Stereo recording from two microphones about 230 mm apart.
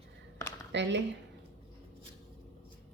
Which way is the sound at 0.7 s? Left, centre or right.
Right.